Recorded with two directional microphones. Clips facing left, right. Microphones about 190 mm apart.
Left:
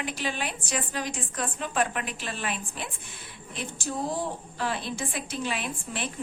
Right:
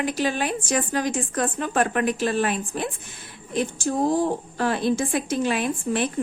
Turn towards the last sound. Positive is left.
turn(degrees=-45)  # may be behind; listen again after turning